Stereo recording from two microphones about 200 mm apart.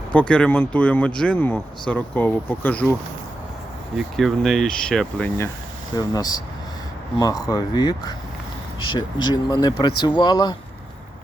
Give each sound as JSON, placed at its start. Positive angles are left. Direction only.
{"t": 0.1, "sound": "speech", "side_deg": 5}
{"t": 3.9, "sound": "speech", "side_deg": 0}
{"t": 6.0, "sound": "speech", "side_deg": 20}